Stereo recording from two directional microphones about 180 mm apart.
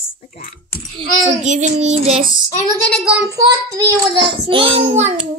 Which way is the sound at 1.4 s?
40° right (ahead or behind).